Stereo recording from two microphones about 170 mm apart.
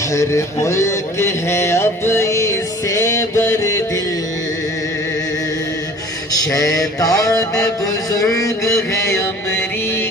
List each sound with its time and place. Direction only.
0.1 s speech: 15° left (ahead or behind)
6.3 s mantra: 20° left (ahead or behind)
7.0 s music: 20° left (ahead or behind)
8.1 s mantra: 20° left (ahead or behind)